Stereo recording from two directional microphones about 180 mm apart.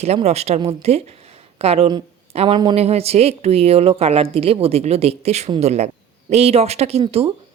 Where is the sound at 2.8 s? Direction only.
35° right (ahead or behind).